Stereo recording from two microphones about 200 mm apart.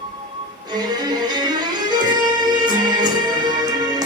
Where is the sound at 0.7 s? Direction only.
20° right (ahead or behind).